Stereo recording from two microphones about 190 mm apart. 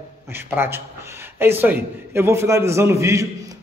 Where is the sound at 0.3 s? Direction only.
10° right (ahead or behind).